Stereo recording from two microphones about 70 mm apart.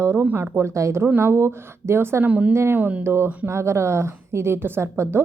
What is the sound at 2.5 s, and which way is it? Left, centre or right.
Speech, right.